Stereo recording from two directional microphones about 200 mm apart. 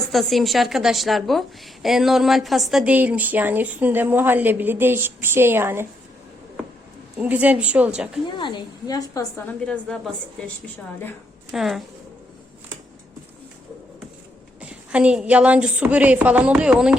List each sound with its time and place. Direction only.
0.1 s a woman's voice: centre (ahead or behind)
7.2 s a woman's voice: 5° right (ahead or behind)
8.4 s a woman's voice: 25° left (ahead or behind)
9.5 s a woman's voice: 5° left (ahead or behind)
11.5 s a woman's voice: centre (ahead or behind)
14.6 s a woman's voice: 5° right (ahead or behind)